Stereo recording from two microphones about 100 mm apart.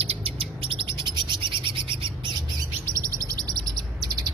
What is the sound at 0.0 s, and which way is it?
Bird, 70° right (ahead or behind).